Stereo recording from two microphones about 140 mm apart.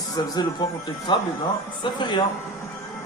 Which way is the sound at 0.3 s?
30° left (ahead or behind).